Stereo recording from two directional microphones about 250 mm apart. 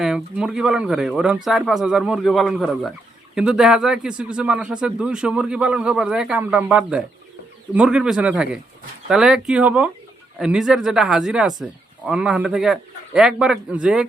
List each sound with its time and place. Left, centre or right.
0.0 s speech: centre